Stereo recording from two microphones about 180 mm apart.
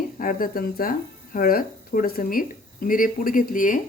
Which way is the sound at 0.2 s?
50° left (ahead or behind).